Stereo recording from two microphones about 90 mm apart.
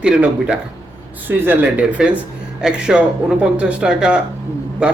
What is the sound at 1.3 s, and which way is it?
Speech, 25° right (ahead or behind).